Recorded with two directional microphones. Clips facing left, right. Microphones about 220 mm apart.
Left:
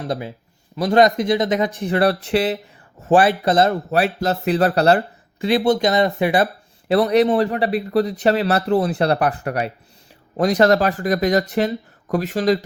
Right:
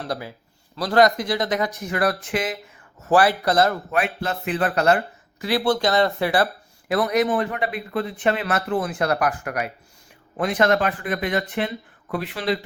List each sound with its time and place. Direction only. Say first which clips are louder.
0.0 s speech: left 4 dB; 20° left (ahead or behind)
3.9 s speech: left 5 dB; 40° left (ahead or behind); by 6.9 s 20° left (ahead or behind)
6.9 s speech: left 5 dB; 30° left (ahead or behind)